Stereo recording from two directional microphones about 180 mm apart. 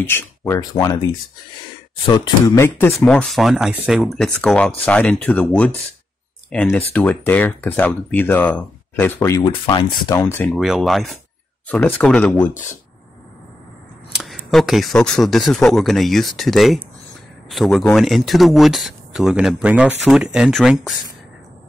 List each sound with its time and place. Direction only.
0.1 s speech: 15° left (ahead or behind)
2.0 s speech: 25° left (ahead or behind)
2.4 s speech: 15° left (ahead or behind)
9.4 s speech: 30° left (ahead or behind)
10.2 s speech: 10° left (ahead or behind)
10.6 s speech: centre (ahead or behind)
14.1 s speech: centre (ahead or behind)